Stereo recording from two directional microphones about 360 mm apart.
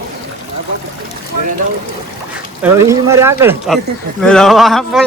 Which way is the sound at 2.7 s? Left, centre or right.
Centre.